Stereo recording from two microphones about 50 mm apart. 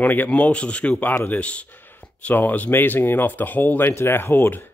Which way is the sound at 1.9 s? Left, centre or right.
Left.